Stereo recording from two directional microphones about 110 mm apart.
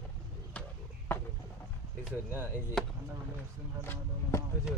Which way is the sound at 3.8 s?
20° left (ahead or behind).